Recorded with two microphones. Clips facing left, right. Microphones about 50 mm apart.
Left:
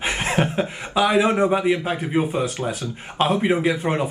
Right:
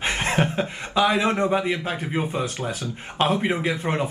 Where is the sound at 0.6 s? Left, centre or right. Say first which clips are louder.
Left 1 dB; centre.